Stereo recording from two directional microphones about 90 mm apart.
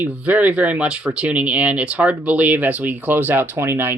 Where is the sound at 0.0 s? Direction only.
20° right (ahead or behind).